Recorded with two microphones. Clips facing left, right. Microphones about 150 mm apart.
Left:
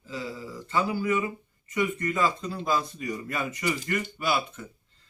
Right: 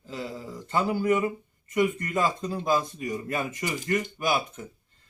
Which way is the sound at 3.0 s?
20° right (ahead or behind).